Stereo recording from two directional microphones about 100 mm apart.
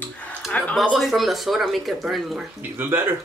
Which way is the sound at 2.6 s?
20° right (ahead or behind).